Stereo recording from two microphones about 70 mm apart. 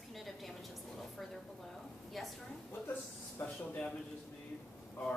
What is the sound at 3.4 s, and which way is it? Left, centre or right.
Speech, left.